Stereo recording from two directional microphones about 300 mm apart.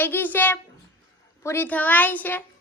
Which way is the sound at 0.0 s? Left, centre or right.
Centre.